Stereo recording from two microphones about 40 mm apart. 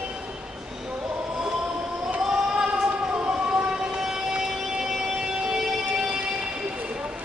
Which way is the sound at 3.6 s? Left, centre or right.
Right.